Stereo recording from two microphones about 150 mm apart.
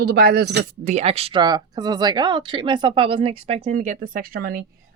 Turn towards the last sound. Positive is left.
turn(degrees=-80)